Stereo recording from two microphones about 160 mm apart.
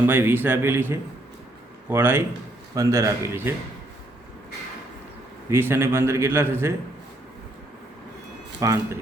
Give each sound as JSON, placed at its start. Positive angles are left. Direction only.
{"t": 0.1, "sound": "a man's voice", "side_deg": -15}
{"t": 5.5, "sound": "a man's voice", "side_deg": -15}
{"t": 8.6, "sound": "speech", "side_deg": -20}